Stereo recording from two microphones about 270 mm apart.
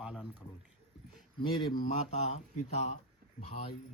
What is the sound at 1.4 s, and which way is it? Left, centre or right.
Speech, centre.